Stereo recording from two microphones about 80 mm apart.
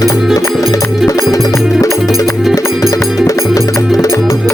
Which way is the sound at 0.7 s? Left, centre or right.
Left.